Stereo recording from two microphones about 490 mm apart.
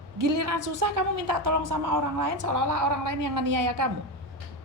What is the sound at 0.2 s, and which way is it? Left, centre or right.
A woman's voice, right.